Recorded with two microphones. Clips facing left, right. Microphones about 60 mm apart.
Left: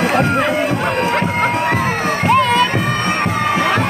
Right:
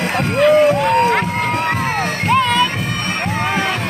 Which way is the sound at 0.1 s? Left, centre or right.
Left.